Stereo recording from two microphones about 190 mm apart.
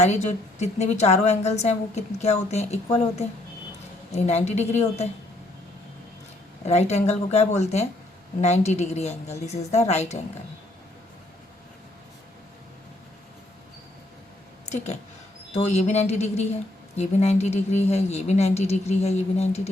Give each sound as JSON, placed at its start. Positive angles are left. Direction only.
{"t": 0.0, "sound": "a woman's voice", "side_deg": 35}
{"t": 4.1, "sound": "a woman's voice", "side_deg": 35}
{"t": 6.7, "sound": "a woman's voice", "side_deg": 35}
{"t": 15.5, "sound": "a woman's voice", "side_deg": 35}